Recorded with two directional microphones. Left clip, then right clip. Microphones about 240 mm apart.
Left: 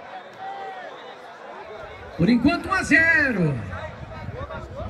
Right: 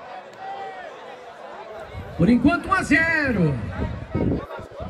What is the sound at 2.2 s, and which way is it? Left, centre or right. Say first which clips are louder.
A man's voice: right 2 dB; right.